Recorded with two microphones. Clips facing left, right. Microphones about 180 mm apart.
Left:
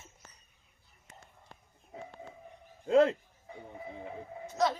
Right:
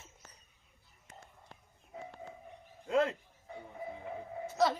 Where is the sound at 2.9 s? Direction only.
30° left (ahead or behind).